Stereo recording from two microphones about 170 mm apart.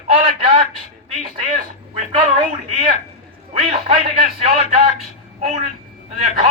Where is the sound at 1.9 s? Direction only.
35° right (ahead or behind).